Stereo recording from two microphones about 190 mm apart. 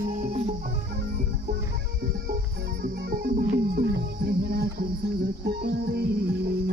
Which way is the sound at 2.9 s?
55° right (ahead or behind).